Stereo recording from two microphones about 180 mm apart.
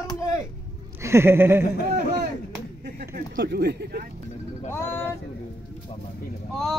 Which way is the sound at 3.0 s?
65° right (ahead or behind).